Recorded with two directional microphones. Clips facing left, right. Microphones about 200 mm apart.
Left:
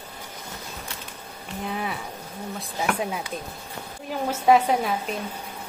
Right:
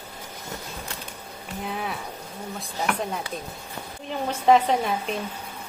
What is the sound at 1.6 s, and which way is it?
A woman's voice, centre (ahead or behind).